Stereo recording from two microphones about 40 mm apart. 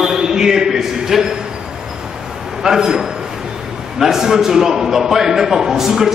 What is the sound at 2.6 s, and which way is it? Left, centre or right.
A man's voice, centre.